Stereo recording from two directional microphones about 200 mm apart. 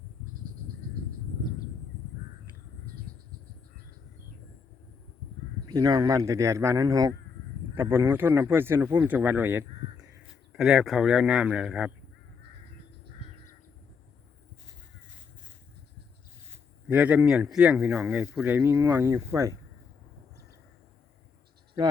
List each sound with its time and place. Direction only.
5.6 s speech: 20° right (ahead or behind)
16.9 s speech: 5° right (ahead or behind)